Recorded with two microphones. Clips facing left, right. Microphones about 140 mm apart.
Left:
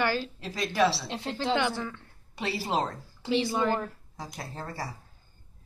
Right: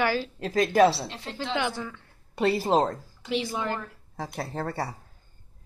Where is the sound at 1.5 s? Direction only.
5° right (ahead or behind).